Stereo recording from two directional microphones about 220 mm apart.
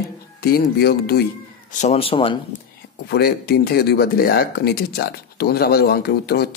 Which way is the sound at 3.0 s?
45° left (ahead or behind).